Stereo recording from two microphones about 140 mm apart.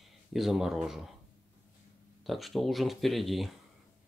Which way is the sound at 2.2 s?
Centre (ahead or behind).